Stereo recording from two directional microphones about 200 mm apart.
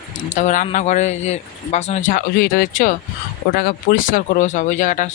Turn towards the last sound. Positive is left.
turn(degrees=40)  # may be behind; listen again after turning